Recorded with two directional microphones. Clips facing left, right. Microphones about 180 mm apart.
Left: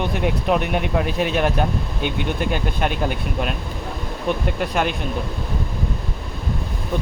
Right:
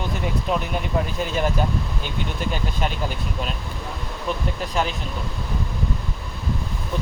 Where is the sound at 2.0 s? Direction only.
60° left (ahead or behind).